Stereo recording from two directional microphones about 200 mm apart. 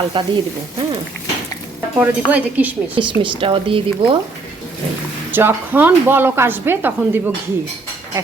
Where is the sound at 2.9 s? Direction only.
25° right (ahead or behind).